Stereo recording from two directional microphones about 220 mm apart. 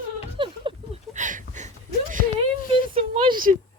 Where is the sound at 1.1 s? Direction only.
35° right (ahead or behind).